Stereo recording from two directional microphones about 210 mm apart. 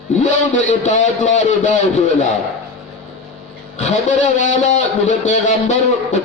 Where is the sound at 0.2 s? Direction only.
35° left (ahead or behind).